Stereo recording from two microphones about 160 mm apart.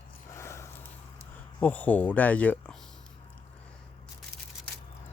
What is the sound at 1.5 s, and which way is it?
Speech, 10° left (ahead or behind).